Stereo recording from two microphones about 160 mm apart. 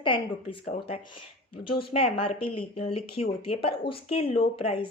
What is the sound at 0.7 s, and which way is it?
Speech, 75° left (ahead or behind).